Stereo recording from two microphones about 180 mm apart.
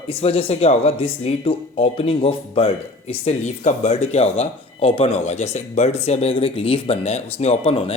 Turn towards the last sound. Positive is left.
turn(degrees=35)  # may be behind; listen again after turning